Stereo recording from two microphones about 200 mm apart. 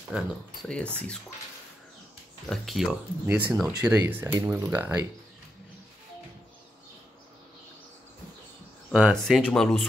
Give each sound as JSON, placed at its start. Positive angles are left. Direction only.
{"t": 0.1, "sound": "speech", "side_deg": 0}
{"t": 2.5, "sound": "speech", "side_deg": 0}
{"t": 3.8, "sound": "speech", "side_deg": -15}
{"t": 8.9, "sound": "speech", "side_deg": 0}